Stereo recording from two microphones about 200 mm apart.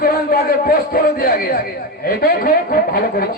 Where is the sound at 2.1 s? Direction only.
45° left (ahead or behind).